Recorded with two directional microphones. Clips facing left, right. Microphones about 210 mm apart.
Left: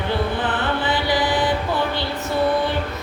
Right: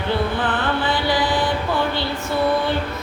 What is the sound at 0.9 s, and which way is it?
Mantra, 20° left (ahead or behind).